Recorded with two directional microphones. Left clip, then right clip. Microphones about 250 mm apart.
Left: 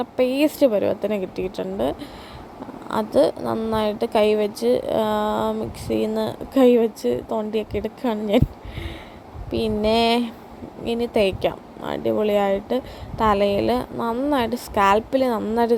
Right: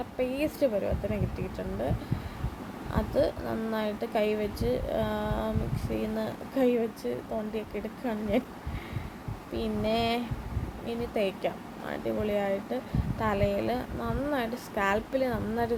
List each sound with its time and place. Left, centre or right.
0.2 s a woman's voice: left
2.9 s a woman's voice: left
9.5 s a woman's voice: left